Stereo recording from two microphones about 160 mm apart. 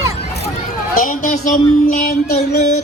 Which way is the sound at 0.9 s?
55° left (ahead or behind).